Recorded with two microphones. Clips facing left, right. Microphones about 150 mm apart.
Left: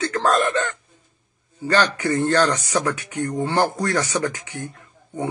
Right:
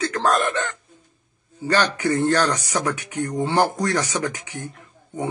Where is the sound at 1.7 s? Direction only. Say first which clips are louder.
Left 1 dB; 15° right (ahead or behind).